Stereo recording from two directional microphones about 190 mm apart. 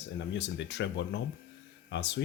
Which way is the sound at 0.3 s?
65° left (ahead or behind).